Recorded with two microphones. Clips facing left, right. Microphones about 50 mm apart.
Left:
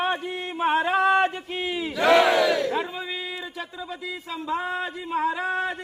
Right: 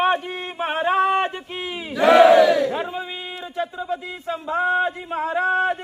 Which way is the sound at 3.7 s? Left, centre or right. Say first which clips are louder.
Right 5 dB; right.